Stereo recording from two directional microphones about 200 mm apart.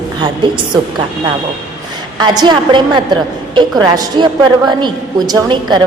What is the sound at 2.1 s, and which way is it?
Speech, 20° right (ahead or behind).